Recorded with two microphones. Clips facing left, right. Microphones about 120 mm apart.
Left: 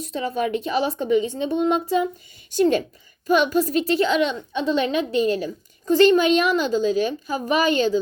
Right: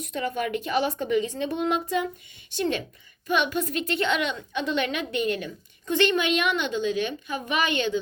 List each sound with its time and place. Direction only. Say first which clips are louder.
0.0 s speech: left 4 dB; 30° left (ahead or behind)
2.5 s a woman's voice: left 8 dB; 40° left (ahead or behind)